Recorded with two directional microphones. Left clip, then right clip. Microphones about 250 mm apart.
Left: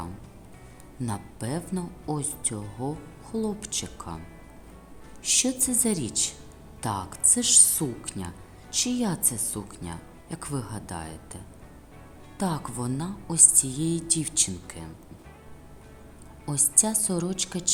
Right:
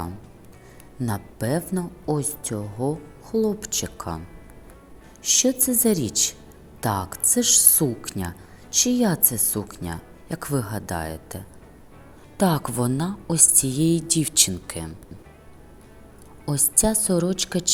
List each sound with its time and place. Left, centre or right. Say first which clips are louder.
0.9 s a woman's voice: right 5 dB; centre
5.2 s a woman's voice: right 5 dB; centre
16.5 s speech: right 4 dB; centre